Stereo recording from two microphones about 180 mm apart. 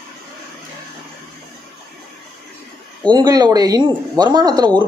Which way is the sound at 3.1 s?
20° right (ahead or behind).